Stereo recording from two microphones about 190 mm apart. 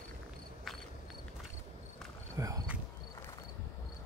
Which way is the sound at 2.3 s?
20° right (ahead or behind).